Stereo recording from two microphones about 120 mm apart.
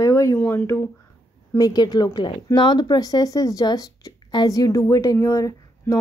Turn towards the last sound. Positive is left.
turn(degrees=25)  # may be behind; listen again after turning